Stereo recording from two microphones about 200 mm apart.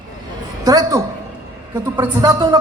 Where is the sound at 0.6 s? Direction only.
20° right (ahead or behind).